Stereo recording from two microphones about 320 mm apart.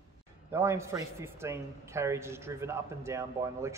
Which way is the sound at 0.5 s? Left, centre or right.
Centre.